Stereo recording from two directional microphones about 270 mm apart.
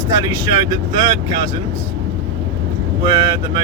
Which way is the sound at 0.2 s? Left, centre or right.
Centre.